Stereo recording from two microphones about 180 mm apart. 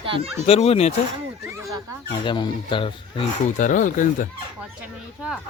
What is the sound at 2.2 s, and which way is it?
Speech, 25° left (ahead or behind).